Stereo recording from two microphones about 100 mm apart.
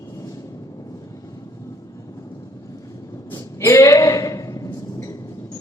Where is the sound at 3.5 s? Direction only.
30° left (ahead or behind).